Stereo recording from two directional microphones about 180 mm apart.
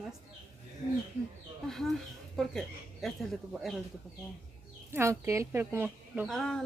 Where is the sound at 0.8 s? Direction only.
35° right (ahead or behind).